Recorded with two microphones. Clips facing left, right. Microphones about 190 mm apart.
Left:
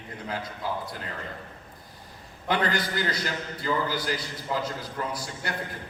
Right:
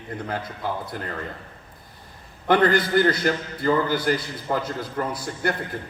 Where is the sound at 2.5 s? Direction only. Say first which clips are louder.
Right 8 dB; 55° right (ahead or behind).